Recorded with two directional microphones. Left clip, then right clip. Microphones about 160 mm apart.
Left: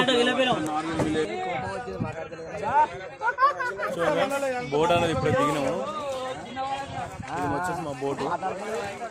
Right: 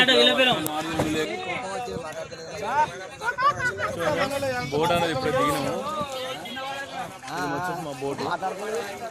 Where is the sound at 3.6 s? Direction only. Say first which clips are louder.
Right 1 dB; 65° left (ahead or behind).